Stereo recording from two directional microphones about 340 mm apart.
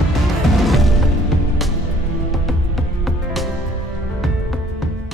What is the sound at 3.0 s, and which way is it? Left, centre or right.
Music, centre.